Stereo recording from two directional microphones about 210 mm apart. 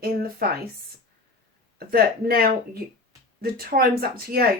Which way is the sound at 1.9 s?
45° right (ahead or behind).